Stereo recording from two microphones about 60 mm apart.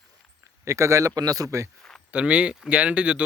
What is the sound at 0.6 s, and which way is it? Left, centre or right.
Speech, right.